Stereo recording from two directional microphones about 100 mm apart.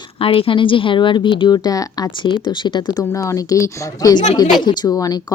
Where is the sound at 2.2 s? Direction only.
50° left (ahead or behind).